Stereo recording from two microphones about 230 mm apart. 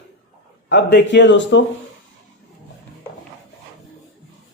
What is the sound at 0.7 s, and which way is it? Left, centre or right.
Speech, left.